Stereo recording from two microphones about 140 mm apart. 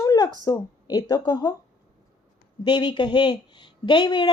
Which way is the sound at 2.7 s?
30° left (ahead or behind).